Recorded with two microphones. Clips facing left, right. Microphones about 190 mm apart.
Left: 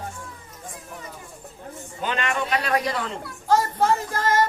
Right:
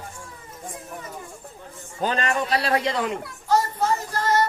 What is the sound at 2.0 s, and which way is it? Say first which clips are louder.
A man's voice: right 2 dB; 35° right (ahead or behind).